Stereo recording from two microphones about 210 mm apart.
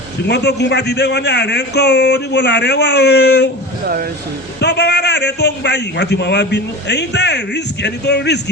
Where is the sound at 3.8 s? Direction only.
45° right (ahead or behind).